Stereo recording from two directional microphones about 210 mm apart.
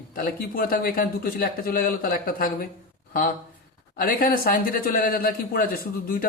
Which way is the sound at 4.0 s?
40° left (ahead or behind).